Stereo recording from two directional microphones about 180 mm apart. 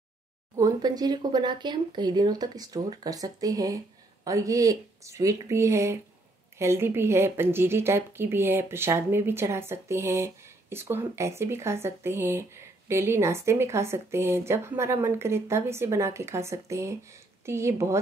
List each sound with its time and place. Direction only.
0.6 s speech: 20° right (ahead or behind)